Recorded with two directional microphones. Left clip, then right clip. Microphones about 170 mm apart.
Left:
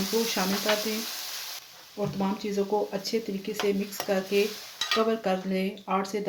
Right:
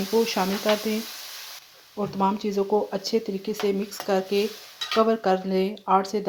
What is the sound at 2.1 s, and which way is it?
Speech, 45° right (ahead or behind).